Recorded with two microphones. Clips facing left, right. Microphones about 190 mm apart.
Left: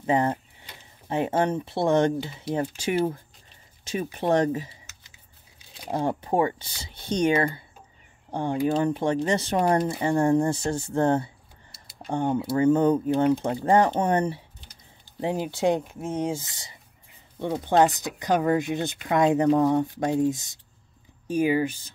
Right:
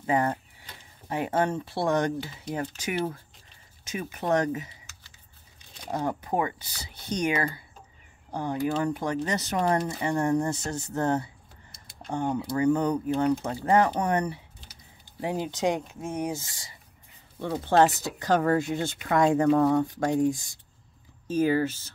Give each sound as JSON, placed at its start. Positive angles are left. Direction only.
{"t": 0.0, "sound": "speech", "side_deg": 25}
{"t": 3.8, "sound": "speech", "side_deg": 30}
{"t": 5.9, "sound": "speech", "side_deg": 30}
{"t": 15.5, "sound": "speech", "side_deg": -15}
{"t": 16.0, "sound": "speech", "side_deg": 20}